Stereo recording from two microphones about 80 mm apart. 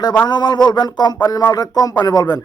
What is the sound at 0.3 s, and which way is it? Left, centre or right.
A man's voice, left.